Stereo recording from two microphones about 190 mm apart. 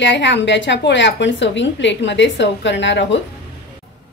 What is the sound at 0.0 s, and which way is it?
A woman's voice, 70° left (ahead or behind).